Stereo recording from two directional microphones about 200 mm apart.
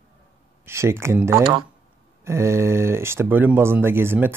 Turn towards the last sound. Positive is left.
turn(degrees=-10)  # may be behind; listen again after turning